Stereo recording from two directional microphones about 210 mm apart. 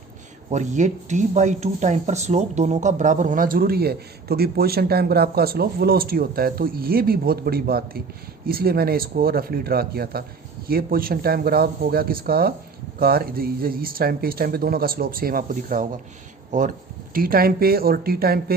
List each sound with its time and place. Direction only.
0.5 s speech: 35° right (ahead or behind)